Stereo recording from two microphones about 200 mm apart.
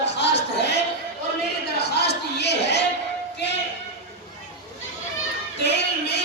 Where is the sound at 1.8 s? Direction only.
55° left (ahead or behind).